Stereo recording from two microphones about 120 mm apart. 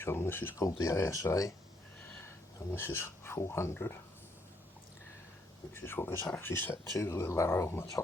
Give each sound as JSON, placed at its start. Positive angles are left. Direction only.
{"t": 0.0, "sound": "speech", "side_deg": 20}
{"t": 2.7, "sound": "speech", "side_deg": 20}
{"t": 5.7, "sound": "speech", "side_deg": 20}